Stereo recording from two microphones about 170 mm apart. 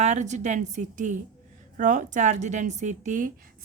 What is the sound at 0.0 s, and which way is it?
A woman's voice, 45° right (ahead or behind).